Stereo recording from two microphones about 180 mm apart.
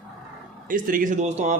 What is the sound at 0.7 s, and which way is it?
Speech, 50° right (ahead or behind).